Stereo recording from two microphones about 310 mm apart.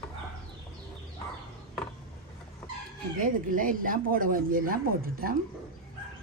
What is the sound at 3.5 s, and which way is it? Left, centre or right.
Speech, right.